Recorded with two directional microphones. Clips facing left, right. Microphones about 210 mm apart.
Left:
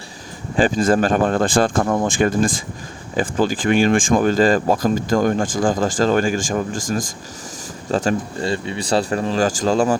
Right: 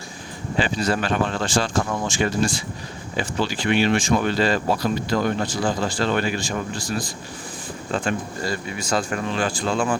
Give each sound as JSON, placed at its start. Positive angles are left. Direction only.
{"t": 0.5, "sound": "speech", "side_deg": 45}
{"t": 8.4, "sound": "speech", "side_deg": 25}